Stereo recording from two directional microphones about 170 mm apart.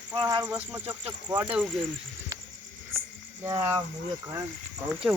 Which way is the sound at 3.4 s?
20° right (ahead or behind).